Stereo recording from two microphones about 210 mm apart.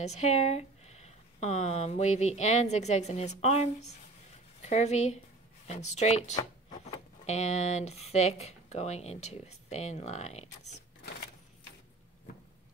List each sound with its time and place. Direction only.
0.0 s a woman's voice: 30° left (ahead or behind)